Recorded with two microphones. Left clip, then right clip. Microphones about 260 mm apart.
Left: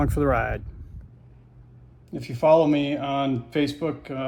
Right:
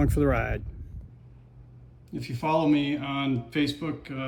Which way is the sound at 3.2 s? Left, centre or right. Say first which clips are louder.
Left 3 dB; centre.